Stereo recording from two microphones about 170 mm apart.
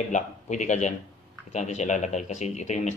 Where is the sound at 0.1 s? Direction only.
45° left (ahead or behind).